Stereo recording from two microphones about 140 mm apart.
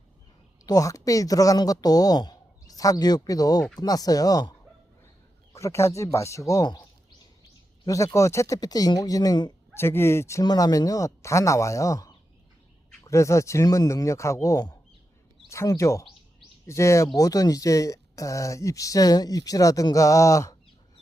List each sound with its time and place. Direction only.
0.6 s speech: 25° left (ahead or behind)
5.5 s speech: 20° left (ahead or behind)
7.9 s speech: 20° left (ahead or behind)
9.7 s speech: 15° left (ahead or behind)